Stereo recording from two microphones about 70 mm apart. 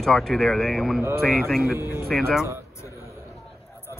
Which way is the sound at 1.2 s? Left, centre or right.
Centre.